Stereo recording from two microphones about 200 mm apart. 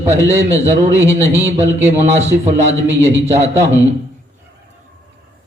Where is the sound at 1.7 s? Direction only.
10° right (ahead or behind).